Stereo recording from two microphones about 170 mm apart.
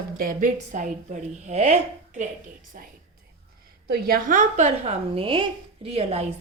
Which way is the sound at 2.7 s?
55° right (ahead or behind).